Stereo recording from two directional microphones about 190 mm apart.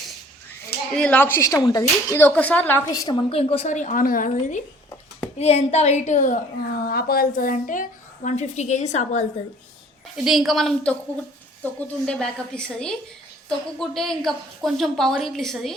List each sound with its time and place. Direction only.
0.9 s a woman's voice: 5° left (ahead or behind); by 6.4 s 40° left (ahead or behind)
6.8 s a woman's voice: 55° left (ahead or behind); by 9.2 s 35° left (ahead or behind)
10.2 s a woman's voice: centre (ahead or behind)